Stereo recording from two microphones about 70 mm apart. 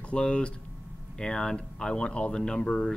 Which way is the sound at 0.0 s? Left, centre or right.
Centre.